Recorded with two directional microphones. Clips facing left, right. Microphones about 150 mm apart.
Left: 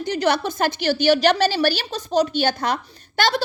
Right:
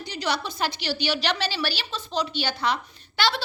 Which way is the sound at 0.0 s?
50° left (ahead or behind).